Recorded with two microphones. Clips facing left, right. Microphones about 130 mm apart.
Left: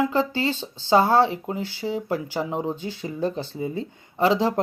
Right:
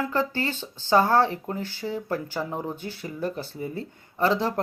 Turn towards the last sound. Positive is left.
turn(degrees=20)  # may be behind; listen again after turning